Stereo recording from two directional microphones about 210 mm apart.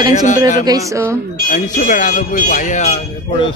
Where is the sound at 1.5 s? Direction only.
40° left (ahead or behind).